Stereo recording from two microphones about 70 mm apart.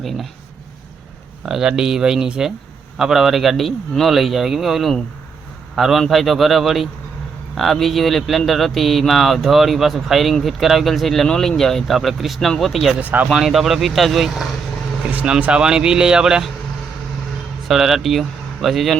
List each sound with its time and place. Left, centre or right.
0.0 s speech: centre
1.5 s speech: centre
13.0 s speech: right
13.3 s speech: centre
15.1 s speech: centre
17.7 s speech: centre